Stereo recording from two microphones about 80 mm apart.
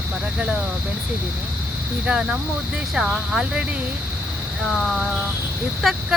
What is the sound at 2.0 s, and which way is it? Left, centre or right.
Speech, centre.